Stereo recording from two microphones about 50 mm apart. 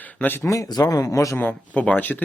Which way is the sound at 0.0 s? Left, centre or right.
Left.